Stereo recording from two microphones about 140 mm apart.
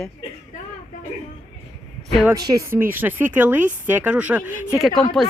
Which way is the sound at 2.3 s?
25° right (ahead or behind).